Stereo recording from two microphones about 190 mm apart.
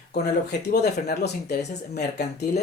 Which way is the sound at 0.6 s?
60° left (ahead or behind).